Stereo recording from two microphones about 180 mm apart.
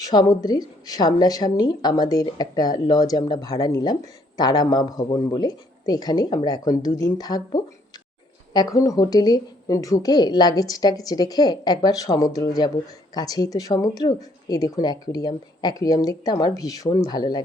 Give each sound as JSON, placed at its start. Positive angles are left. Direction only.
{"t": 0.0, "sound": "speech", "side_deg": 20}